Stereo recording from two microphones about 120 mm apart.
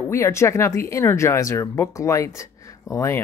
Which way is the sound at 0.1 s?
25° left (ahead or behind).